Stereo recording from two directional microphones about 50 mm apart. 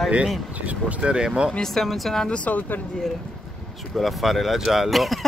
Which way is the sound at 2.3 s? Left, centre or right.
Left.